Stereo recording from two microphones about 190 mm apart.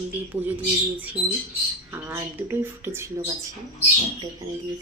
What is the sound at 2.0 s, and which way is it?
Speech, 10° right (ahead or behind).